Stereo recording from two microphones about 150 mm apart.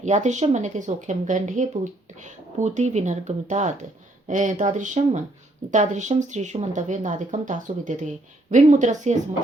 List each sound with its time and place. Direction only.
0.0 s speech: 55° right (ahead or behind)